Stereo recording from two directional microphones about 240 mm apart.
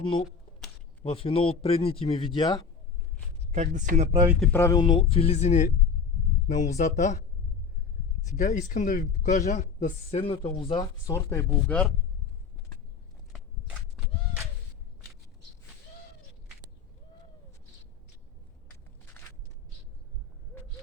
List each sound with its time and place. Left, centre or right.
1.0 s speech: left
3.5 s speech: right
4.4 s speech: centre; by 7.2 s left
8.4 s speech: left; by 11.9 s centre